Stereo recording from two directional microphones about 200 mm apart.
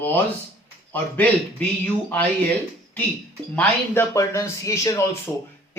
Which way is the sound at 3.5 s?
15° left (ahead or behind).